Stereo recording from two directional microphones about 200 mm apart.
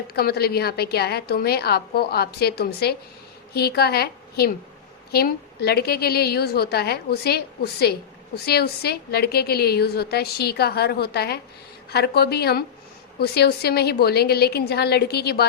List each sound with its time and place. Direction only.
0.1 s a woman's voice: 50° left (ahead or behind)